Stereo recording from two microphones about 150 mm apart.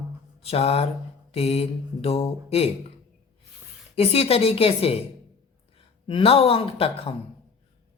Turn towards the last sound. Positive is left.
turn(degrees=40)  # may be behind; listen again after turning